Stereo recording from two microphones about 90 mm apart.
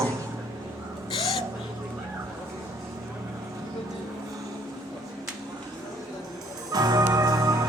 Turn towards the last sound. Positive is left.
turn(degrees=-45)  # may be behind; listen again after turning